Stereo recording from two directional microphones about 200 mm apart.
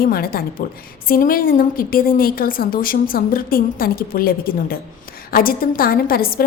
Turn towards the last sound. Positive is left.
turn(degrees=45)  # may be behind; listen again after turning